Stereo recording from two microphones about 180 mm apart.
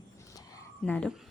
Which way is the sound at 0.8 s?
5° left (ahead or behind).